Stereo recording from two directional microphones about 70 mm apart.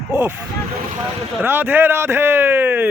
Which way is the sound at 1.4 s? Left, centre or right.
Right.